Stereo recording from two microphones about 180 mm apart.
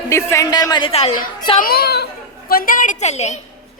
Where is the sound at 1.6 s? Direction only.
60° left (ahead or behind); by 3.3 s 40° left (ahead or behind).